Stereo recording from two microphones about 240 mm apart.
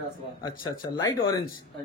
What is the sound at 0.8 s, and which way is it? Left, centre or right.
Speech, centre.